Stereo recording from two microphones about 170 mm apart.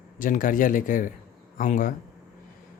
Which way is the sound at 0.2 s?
55° left (ahead or behind).